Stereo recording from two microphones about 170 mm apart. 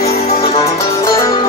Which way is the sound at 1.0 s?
20° left (ahead or behind).